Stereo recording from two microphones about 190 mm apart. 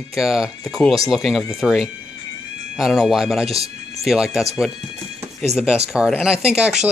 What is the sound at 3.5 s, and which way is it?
Music, 30° right (ahead or behind).